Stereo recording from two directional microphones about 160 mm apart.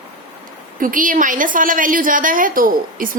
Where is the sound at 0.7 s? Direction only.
60° right (ahead or behind).